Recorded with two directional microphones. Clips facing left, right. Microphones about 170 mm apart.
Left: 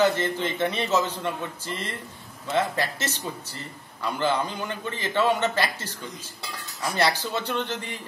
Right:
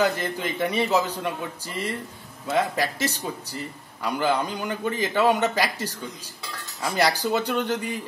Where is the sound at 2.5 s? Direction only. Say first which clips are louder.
Right 1 dB; 10° right (ahead or behind).